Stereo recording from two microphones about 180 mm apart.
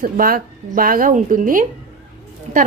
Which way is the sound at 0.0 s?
50° right (ahead or behind).